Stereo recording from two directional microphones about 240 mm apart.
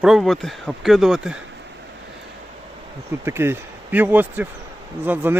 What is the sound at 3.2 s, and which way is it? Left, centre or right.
Speech, centre.